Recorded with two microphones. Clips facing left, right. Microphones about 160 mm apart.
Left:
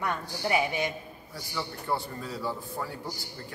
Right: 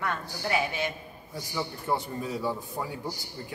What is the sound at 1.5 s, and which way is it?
A man's voice, 20° right (ahead or behind).